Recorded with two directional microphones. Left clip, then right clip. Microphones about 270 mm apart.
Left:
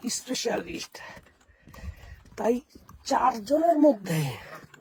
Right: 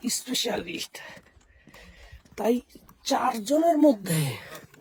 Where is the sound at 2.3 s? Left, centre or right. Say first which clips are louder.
Right 1 dB; centre.